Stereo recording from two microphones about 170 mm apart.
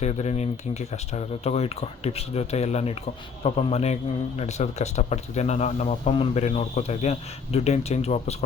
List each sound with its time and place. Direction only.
0.0 s speech: 40° left (ahead or behind)